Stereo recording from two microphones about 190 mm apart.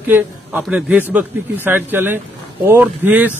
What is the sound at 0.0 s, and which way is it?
A man's voice, 10° right (ahead or behind).